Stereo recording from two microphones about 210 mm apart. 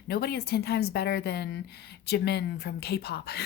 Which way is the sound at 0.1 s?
50° left (ahead or behind).